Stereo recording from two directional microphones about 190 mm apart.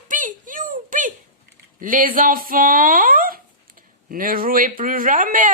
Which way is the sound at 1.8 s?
45° right (ahead or behind).